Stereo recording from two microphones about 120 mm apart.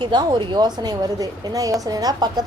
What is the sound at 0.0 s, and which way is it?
A woman's voice, 40° right (ahead or behind).